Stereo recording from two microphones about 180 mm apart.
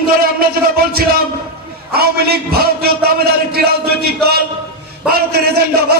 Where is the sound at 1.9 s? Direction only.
60° right (ahead or behind).